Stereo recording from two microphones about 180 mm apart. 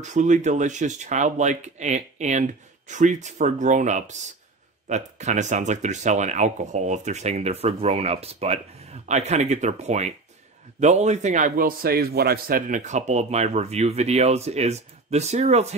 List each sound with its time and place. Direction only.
0.0 s a man's voice: 40° right (ahead or behind)